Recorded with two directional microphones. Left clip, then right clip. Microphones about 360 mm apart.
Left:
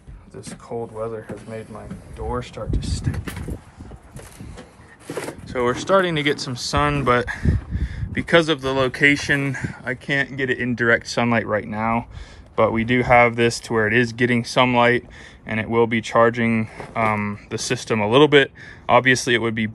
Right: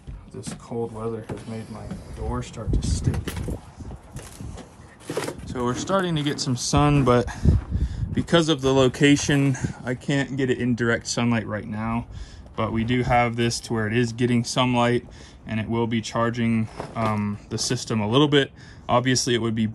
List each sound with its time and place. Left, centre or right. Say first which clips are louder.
0.5 s speech: even; centre
1.2 s speech: left 2 dB; centre
5.5 s speech: left 7 dB; centre